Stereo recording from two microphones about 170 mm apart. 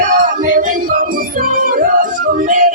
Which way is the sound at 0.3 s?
50° right (ahead or behind).